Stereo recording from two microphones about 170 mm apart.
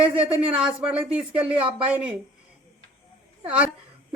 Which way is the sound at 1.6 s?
30° right (ahead or behind).